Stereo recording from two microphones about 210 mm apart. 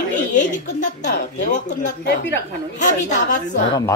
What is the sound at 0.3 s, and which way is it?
Speech, 35° left (ahead or behind).